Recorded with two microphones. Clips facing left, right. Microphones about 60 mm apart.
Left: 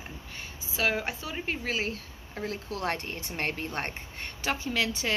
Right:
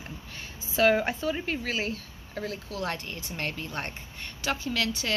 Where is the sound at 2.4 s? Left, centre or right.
Left.